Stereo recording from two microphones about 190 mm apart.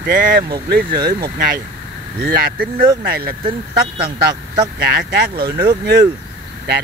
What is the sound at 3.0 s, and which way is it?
Speech, 55° right (ahead or behind).